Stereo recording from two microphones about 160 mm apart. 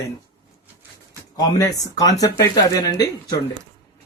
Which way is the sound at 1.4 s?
20° left (ahead or behind).